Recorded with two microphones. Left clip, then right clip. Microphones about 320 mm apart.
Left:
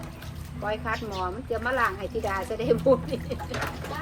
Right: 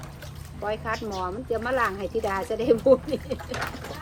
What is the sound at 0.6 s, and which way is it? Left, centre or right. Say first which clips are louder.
Speech: right 1 dB; right.